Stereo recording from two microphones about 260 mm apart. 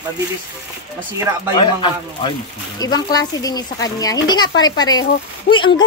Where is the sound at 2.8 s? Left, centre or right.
Centre.